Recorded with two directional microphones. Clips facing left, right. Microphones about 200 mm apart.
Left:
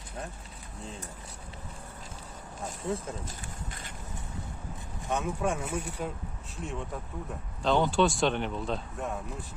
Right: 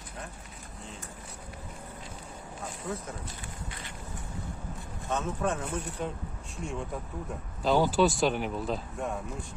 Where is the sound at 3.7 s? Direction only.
45° left (ahead or behind).